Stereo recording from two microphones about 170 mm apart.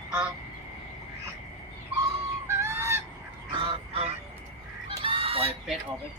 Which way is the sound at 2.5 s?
15° right (ahead or behind).